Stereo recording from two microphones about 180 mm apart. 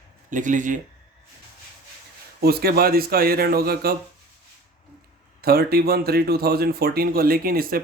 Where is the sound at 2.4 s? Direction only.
60° right (ahead or behind).